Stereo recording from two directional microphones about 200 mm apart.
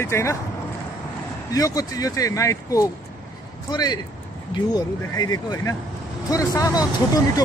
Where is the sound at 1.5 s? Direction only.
15° left (ahead or behind).